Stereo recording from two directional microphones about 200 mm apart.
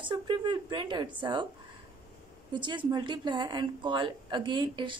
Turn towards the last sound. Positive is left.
turn(degrees=-25)  # may be behind; listen again after turning